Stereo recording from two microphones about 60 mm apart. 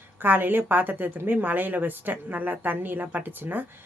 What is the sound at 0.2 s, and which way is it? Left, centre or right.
A woman's voice, right.